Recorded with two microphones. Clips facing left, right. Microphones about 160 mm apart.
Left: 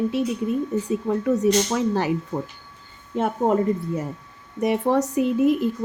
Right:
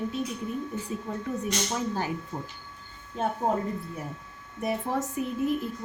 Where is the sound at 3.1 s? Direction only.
90° left.